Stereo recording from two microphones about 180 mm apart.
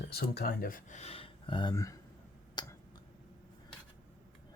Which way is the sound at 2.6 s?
25° left (ahead or behind).